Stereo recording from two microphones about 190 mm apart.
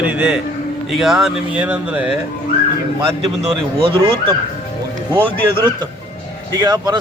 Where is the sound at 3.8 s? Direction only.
25° right (ahead or behind).